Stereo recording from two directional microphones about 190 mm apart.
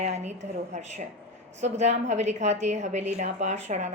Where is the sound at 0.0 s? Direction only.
35° right (ahead or behind).